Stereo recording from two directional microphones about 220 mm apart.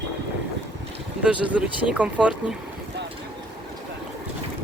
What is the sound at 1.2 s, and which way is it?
Speech, 5° right (ahead or behind).